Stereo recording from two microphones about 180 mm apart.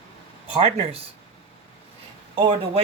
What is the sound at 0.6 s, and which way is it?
Speech, 35° right (ahead or behind).